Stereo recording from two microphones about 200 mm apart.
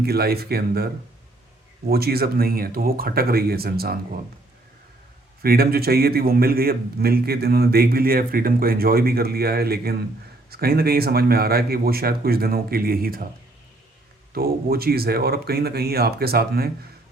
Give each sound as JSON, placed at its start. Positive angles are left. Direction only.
{"t": 0.0, "sound": "a man's voice", "side_deg": -50}
{"t": 1.9, "sound": "a man's voice", "side_deg": -50}
{"t": 5.4, "sound": "a man's voice", "side_deg": -50}
{"t": 14.3, "sound": "a man's voice", "side_deg": -50}